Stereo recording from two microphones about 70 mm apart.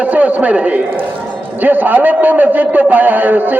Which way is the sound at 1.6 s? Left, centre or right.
Right.